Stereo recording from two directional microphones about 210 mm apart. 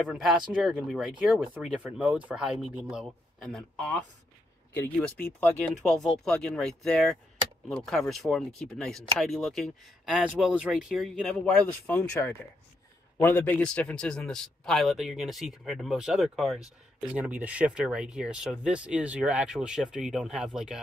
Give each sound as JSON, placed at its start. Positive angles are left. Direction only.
{"t": 0.0, "sound": "a man's voice", "side_deg": 0}